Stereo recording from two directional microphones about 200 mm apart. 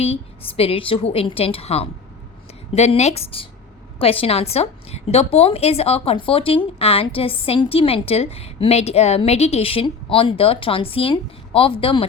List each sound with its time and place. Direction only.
0.0 s a woman's voice: 30° left (ahead or behind)